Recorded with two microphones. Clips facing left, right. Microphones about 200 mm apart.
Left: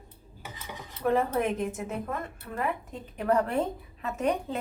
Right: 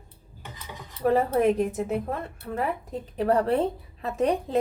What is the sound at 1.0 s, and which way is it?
A woman's voice, 35° right (ahead or behind).